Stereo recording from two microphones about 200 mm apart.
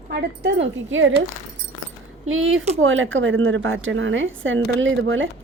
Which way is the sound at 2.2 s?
80° right.